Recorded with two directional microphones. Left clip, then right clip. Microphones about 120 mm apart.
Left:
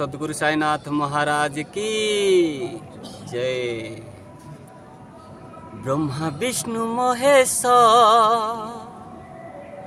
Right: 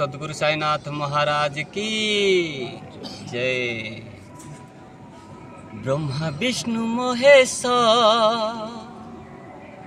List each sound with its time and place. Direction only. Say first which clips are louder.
0.0 s speech: even; 45° left (ahead or behind)
5.8 s speech: left 1 dB; 35° left (ahead or behind)